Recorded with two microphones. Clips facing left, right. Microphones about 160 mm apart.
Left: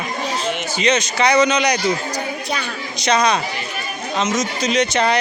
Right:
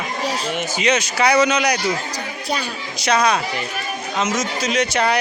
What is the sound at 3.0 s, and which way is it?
A man's voice, 5° right (ahead or behind).